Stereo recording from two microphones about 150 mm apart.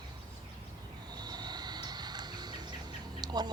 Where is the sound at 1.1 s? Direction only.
30° right (ahead or behind).